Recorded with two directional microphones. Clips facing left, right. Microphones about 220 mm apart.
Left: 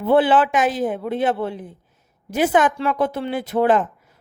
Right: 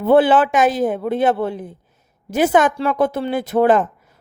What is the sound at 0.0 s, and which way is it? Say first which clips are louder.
Speech: right 3 dB; 45° right (ahead or behind).